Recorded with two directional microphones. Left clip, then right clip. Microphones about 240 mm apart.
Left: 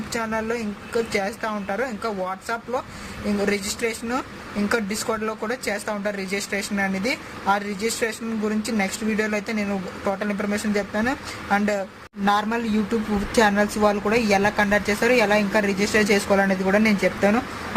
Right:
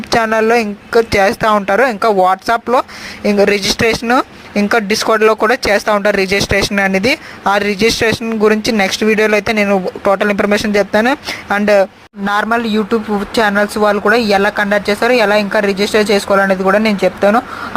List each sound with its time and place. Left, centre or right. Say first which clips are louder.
0.1 s speech: right 15 dB; right
12.2 s speech: right 8 dB; right